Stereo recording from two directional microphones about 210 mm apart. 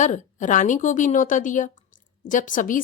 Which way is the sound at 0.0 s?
35° left (ahead or behind).